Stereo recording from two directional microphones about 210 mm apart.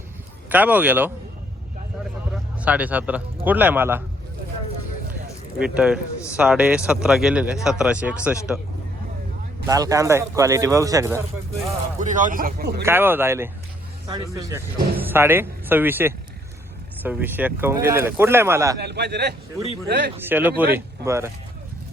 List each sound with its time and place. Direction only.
0.4 s speech: 10° right (ahead or behind)
2.6 s speech: 5° right (ahead or behind)
5.5 s a man's voice: 5° right (ahead or behind)
9.6 s speech: 15° right (ahead or behind)
11.9 s speech: 35° right (ahead or behind)
12.8 s speech: 10° right (ahead or behind)
18.8 s a man's voice: 50° right (ahead or behind)
20.1 s speech: 10° right (ahead or behind)